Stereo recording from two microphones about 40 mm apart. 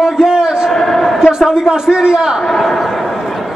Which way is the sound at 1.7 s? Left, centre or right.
Centre.